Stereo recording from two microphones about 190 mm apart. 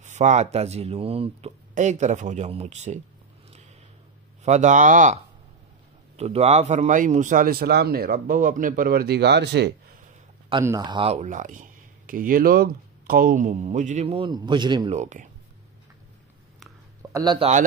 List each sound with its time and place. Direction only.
0.0 s speech: 40° right (ahead or behind)
4.4 s a man's voice: 40° right (ahead or behind); by 9.8 s 60° right (ahead or behind)
10.6 s speech: 20° right (ahead or behind)
15.0 s speech: 40° right (ahead or behind)
17.1 s speech: 20° right (ahead or behind)